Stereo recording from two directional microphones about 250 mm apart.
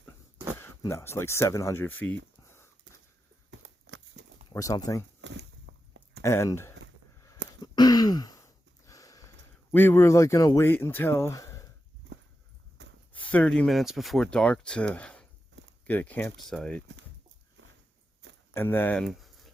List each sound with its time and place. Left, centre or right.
0.6 s speech: centre
2.4 s a sound: centre
3.8 s crumpling: right
4.4 s speech: centre
5.2 s a sound: right
6.2 s speech: centre
7.6 s a sound: centre
9.7 s speech: centre
12.8 s a sound: right
13.1 s speech: centre
17.6 s walk: right
18.5 s speech: centre